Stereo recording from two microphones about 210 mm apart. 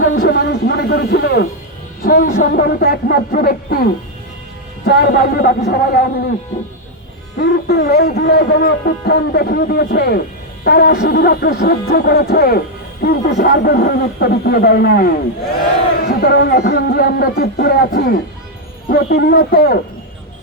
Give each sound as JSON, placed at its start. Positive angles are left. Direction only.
{"t": 0.1, "sound": "a sound", "side_deg": 45}
{"t": 2.0, "sound": "music", "side_deg": 45}
{"t": 4.9, "sound": "music", "side_deg": 50}
{"t": 7.3, "sound": "music", "side_deg": 55}